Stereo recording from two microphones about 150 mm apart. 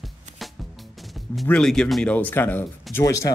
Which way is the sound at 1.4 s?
5° left (ahead or behind).